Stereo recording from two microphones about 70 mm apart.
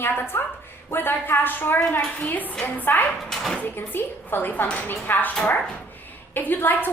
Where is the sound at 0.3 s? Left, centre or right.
Left.